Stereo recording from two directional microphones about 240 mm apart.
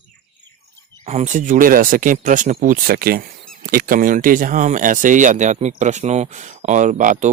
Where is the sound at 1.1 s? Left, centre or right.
Right.